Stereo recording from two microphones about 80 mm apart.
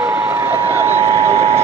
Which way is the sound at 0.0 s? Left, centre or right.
Centre.